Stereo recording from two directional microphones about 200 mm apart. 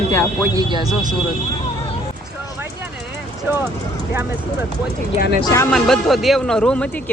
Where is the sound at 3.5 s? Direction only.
10° right (ahead or behind).